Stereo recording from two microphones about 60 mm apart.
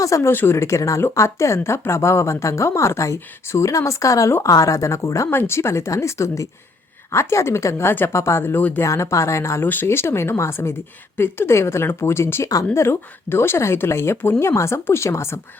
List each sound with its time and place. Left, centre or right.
0.2 s speech: left
5.3 s speech: left
8.8 s speech: left
9.6 s speech: left